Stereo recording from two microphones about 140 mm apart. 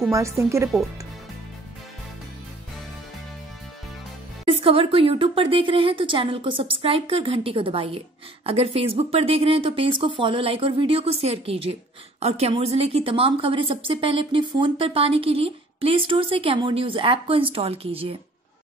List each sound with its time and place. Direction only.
0.1 s speech: 20° right (ahead or behind)
4.5 s a woman's voice: 40° right (ahead or behind)